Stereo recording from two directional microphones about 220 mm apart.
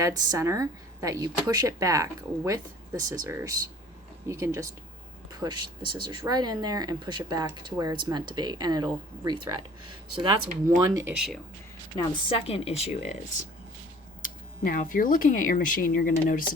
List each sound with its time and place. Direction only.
0.0 s speech: 15° right (ahead or behind)
10.8 s speech: 15° right (ahead or behind)
11.9 s a woman's voice: 20° left (ahead or behind)
14.2 s speech: 35° left (ahead or behind)